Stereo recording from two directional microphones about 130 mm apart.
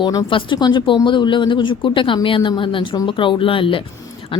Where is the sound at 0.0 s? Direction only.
25° left (ahead or behind).